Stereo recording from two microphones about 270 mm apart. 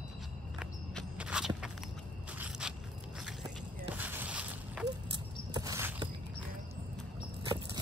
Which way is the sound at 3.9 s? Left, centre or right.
Centre.